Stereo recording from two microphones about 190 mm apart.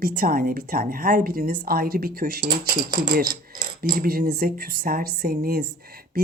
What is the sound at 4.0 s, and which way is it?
A woman's voice, 50° right (ahead or behind).